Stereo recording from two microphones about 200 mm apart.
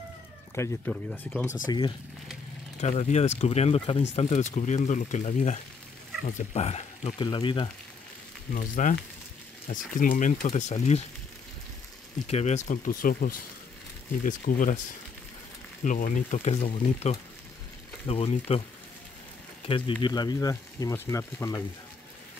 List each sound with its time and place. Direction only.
0.6 s speech: 10° left (ahead or behind)
1.7 s speech: 25° left (ahead or behind)
2.8 s speech: 35° left (ahead or behind)
8.5 s speech: 40° left (ahead or behind)
12.3 s speech: 35° left (ahead or behind)
15.8 s speech: 40° left (ahead or behind)
19.7 s speech: 20° left (ahead or behind)